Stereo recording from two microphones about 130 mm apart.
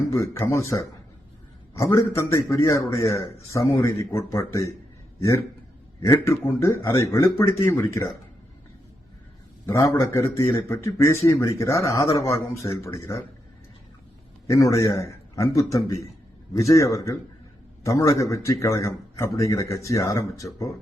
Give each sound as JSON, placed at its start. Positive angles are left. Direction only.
{"t": 0.1, "sound": "speech", "side_deg": 20}
{"t": 6.0, "sound": "speech", "side_deg": 20}
{"t": 9.6, "sound": "speech", "side_deg": 25}
{"t": 14.4, "sound": "speech", "side_deg": 25}